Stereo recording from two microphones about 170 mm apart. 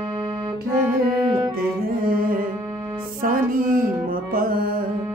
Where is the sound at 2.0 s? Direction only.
55° right (ahead or behind).